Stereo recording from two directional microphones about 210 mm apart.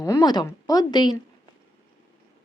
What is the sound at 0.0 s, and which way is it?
Speech, 15° left (ahead or behind).